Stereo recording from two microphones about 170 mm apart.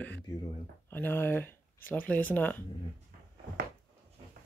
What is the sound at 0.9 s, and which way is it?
Speech, 10° left (ahead or behind).